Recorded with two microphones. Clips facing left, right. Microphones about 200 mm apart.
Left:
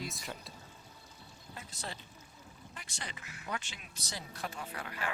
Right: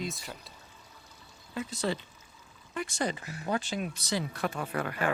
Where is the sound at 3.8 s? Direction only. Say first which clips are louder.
Right 14 dB; 65° right (ahead or behind).